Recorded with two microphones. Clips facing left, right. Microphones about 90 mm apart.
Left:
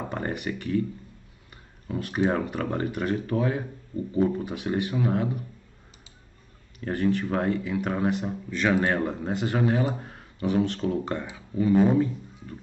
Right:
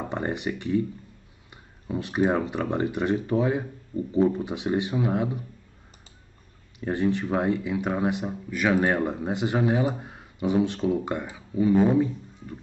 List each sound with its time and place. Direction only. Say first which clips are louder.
0.0 s speech: right 2 dB; 20° right (ahead or behind)
1.9 s speech: right 1 dB; 15° right (ahead or behind)
6.8 s speech: even; 20° right (ahead or behind)